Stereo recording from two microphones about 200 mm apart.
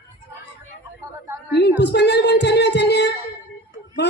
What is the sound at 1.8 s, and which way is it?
Music, 60° left (ahead or behind).